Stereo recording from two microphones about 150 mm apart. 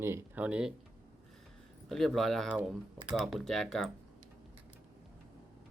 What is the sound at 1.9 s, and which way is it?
Speech, centre (ahead or behind).